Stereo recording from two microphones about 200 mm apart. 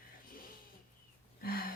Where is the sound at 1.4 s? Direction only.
45° left (ahead or behind).